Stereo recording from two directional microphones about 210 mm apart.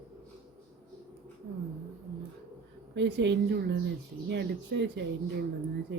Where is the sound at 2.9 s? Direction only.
55° right (ahead or behind).